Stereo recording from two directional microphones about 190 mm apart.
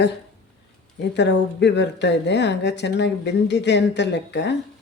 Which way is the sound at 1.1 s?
65° left (ahead or behind).